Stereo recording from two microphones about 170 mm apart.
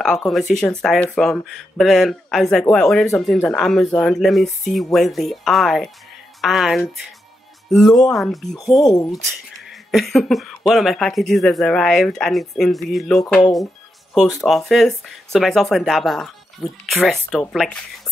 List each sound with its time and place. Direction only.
0.0 s speech: centre (ahead or behind)
8.8 s speech: 20° left (ahead or behind)
9.8 s speech: centre (ahead or behind)